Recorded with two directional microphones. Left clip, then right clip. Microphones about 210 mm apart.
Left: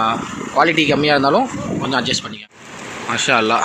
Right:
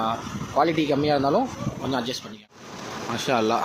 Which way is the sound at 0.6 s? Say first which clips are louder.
Left 7 dB; 5° right (ahead or behind).